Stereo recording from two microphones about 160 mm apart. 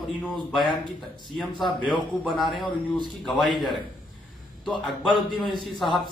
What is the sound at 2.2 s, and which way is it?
Speech, centre (ahead or behind).